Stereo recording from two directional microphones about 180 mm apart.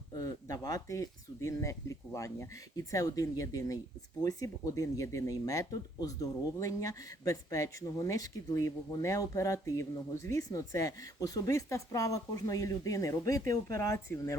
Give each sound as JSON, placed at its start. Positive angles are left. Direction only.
{"t": 0.1, "sound": "speech", "side_deg": 20}